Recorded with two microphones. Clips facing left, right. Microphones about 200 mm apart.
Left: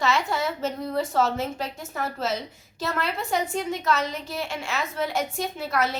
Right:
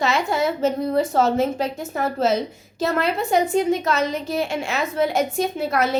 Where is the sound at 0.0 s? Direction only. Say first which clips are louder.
Right 4 dB; 15° right (ahead or behind).